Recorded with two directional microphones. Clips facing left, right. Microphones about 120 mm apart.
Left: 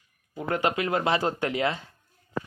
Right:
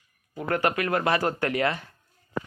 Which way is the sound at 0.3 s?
15° left (ahead or behind).